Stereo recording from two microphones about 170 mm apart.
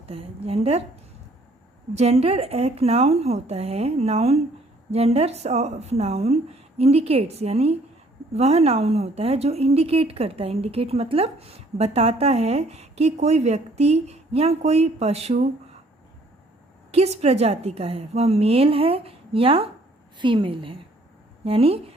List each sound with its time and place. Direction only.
0.0 s a woman's voice: 35° right (ahead or behind)
1.9 s a woman's voice: 40° right (ahead or behind)
16.9 s a woman's voice: 40° right (ahead or behind)